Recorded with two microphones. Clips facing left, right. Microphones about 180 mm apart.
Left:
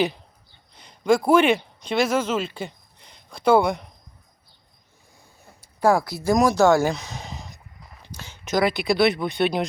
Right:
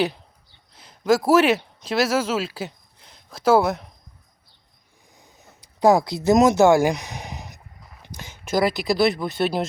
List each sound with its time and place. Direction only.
0.8 s speech: 5° right (ahead or behind)
5.1 s a sound: 20° right (ahead or behind)
8.0 s speech: 15° right (ahead or behind)